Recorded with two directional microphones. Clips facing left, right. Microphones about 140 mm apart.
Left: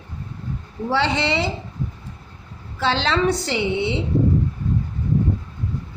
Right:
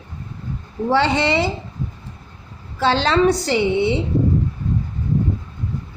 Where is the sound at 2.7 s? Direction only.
40° right (ahead or behind).